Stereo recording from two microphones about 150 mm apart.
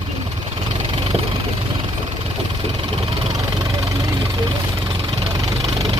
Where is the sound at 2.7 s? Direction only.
40° right (ahead or behind).